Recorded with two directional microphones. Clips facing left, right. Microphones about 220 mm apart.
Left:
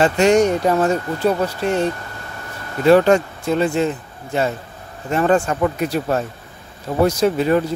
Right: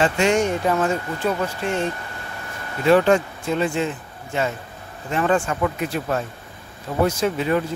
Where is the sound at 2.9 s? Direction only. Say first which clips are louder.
Left 3 dB; 40° left (ahead or behind).